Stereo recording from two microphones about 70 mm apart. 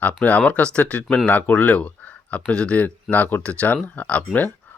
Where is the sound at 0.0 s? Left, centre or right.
Left.